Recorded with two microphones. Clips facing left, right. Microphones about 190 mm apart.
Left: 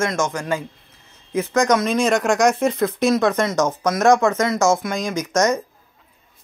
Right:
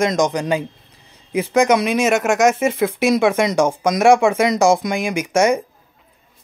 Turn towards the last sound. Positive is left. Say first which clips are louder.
# right 3 dB
turn(degrees=-10)  # may be behind; listen again after turning